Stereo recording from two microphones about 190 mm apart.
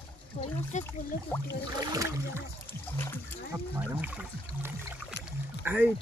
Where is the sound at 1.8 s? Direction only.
20° right (ahead or behind).